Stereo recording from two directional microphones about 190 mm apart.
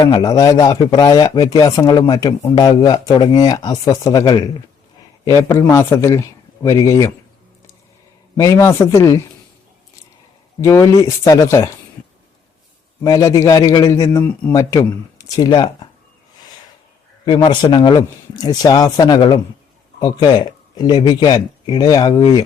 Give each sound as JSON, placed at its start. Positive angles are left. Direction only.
{"t": 0.1, "sound": "speech", "side_deg": 20}
{"t": 8.4, "sound": "speech", "side_deg": 15}
{"t": 10.6, "sound": "speech", "side_deg": 15}
{"t": 13.0, "sound": "speech", "side_deg": 20}
{"t": 17.2, "sound": "speech", "side_deg": 20}